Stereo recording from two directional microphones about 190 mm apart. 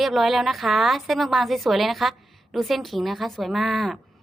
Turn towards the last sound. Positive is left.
turn(degrees=0)  # may be behind; listen again after turning